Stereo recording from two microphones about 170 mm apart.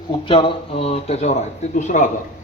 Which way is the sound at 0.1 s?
30° left (ahead or behind).